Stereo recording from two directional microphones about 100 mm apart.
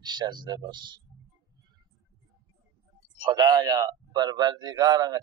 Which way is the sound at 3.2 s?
45° right (ahead or behind).